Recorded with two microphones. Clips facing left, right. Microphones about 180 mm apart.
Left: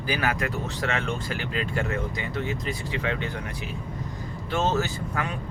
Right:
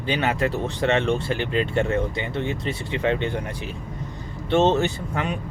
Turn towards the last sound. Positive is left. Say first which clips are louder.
# right 5 dB
turn(degrees=-25)  # may be behind; listen again after turning